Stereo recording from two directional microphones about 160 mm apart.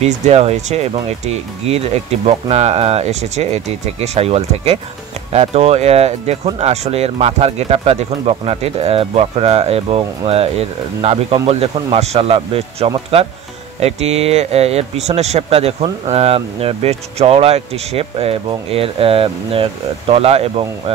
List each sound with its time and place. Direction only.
0.0 s speech: 40° right (ahead or behind)